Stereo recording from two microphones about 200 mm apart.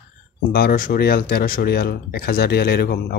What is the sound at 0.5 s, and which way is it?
Speech, 45° left (ahead or behind).